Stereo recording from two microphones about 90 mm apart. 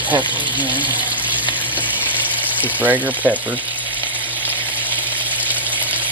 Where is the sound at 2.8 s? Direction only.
20° right (ahead or behind).